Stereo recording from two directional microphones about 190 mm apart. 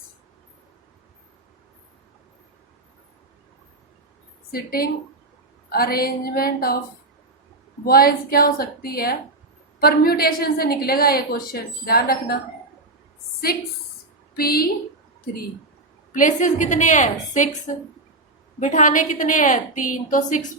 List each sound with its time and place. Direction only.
4.5 s a woman's voice: 50° left (ahead or behind)
7.9 s a woman's voice: 50° left (ahead or behind)
14.3 s a woman's voice: 50° left (ahead or behind)
16.1 s a woman's voice: 40° left (ahead or behind)
18.6 s a woman's voice: 40° left (ahead or behind)